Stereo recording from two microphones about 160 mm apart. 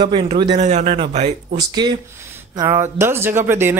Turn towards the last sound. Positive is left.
turn(degrees=-15)  # may be behind; listen again after turning